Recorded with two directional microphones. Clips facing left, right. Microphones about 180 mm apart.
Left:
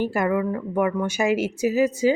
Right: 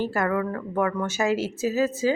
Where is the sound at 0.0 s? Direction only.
15° left (ahead or behind).